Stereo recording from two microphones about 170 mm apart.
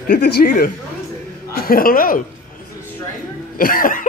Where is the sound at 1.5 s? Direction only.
60° left (ahead or behind).